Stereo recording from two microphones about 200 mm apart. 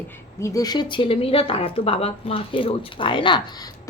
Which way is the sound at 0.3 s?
15° left (ahead or behind).